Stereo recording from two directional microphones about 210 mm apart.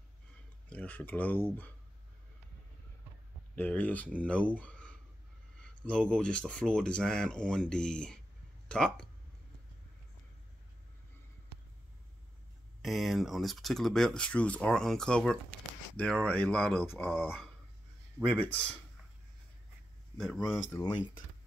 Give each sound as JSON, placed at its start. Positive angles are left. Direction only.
{"t": 0.7, "sound": "speech", "side_deg": 5}
{"t": 3.5, "sound": "speech", "side_deg": 5}
{"t": 12.8, "sound": "speech", "side_deg": 0}
{"t": 20.7, "sound": "speech", "side_deg": 20}